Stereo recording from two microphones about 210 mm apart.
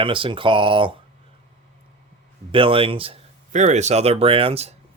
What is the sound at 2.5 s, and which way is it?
Speech, 25° right (ahead or behind).